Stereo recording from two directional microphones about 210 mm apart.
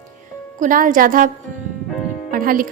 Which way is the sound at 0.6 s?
40° right (ahead or behind).